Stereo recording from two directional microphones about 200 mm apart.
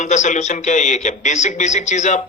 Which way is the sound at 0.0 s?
35° left (ahead or behind).